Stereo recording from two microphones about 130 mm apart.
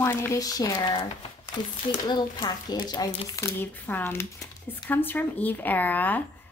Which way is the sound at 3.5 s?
15° left (ahead or behind).